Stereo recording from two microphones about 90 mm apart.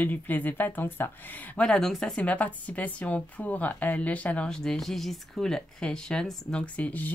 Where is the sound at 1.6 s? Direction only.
5° left (ahead or behind).